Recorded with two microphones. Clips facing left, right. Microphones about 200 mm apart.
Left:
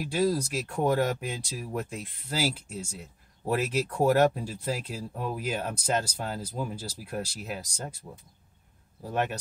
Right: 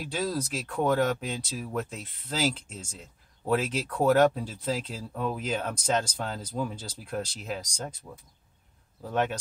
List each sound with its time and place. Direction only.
0.0 s speech: 10° left (ahead or behind)